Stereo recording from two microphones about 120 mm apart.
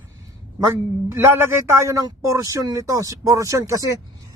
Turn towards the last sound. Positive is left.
turn(degrees=-25)  # may be behind; listen again after turning